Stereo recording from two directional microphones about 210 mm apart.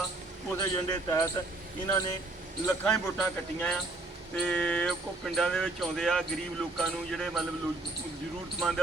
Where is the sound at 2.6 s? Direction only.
5° left (ahead or behind).